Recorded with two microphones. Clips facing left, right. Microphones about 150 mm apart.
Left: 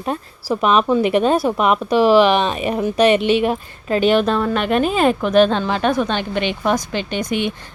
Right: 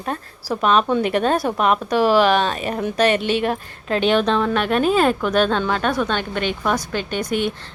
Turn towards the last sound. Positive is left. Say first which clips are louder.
# left 1 dB
turn(degrees=-45)  # may be behind; listen again after turning